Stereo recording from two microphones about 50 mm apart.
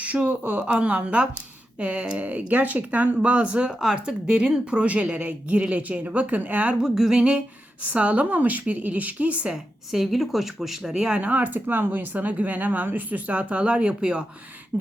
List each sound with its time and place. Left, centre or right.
0.0 s speech: right
6.7 s speech: centre
7.9 s speech: right
9.5 s speech: centre
11.2 s speech: right